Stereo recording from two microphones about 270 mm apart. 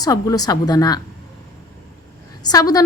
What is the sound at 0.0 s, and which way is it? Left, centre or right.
A woman's voice, centre.